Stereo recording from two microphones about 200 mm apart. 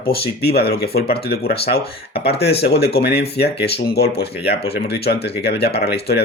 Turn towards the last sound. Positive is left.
turn(degrees=55)  # may be behind; listen again after turning